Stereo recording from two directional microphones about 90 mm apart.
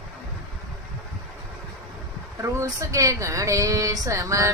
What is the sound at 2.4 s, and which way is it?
Speech, 35° right (ahead or behind).